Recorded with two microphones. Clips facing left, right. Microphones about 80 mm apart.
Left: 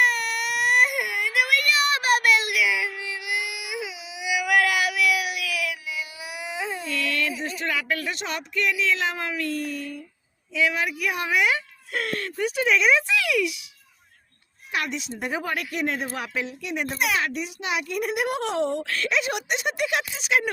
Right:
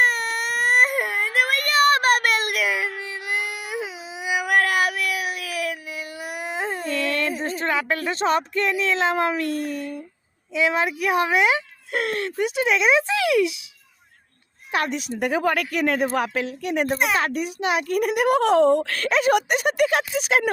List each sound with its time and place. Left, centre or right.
0.0 s baby cry: right
10.5 s speech: right
14.7 s a woman's voice: right
15.2 s speech: right
17.0 s speech: right